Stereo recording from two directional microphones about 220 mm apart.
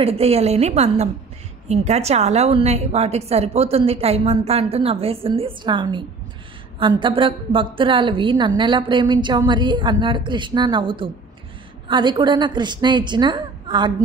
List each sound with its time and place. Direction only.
0.0 s a woman's voice: 25° right (ahead or behind)